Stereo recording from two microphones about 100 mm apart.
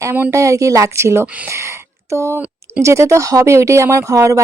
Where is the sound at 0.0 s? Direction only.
30° right (ahead or behind).